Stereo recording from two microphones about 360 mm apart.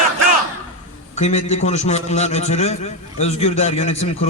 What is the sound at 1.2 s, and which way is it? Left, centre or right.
A man's voice, centre.